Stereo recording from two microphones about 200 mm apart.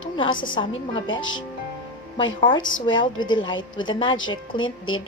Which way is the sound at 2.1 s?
25° left (ahead or behind).